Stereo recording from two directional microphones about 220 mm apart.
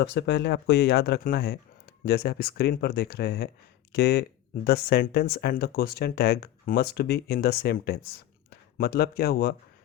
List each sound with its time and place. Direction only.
0.0 s speech: 50° left (ahead or behind)